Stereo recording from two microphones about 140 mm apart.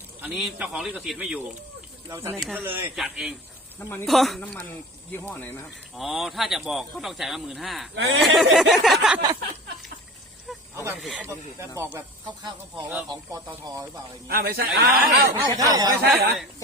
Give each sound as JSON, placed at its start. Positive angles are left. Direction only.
{"t": 0.2, "sound": "speech", "side_deg": -5}
{"t": 2.0, "sound": "speech", "side_deg": -15}
{"t": 2.9, "sound": "speech", "side_deg": -5}
{"t": 6.0, "sound": "speech", "side_deg": 0}
{"t": 10.9, "sound": "speech", "side_deg": -5}
{"t": 11.8, "sound": "speech", "side_deg": -15}
{"t": 13.1, "sound": "speech", "side_deg": -30}
{"t": 14.3, "sound": "speech", "side_deg": -90}
{"t": 15.3, "sound": "speech", "side_deg": -25}
{"t": 16.0, "sound": "speech", "side_deg": 0}